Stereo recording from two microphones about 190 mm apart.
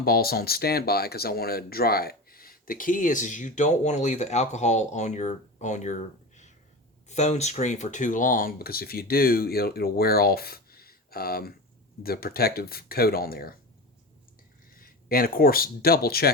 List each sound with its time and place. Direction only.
0.0 s speech: 55° left (ahead or behind)
14.8 s speech: 50° left (ahead or behind)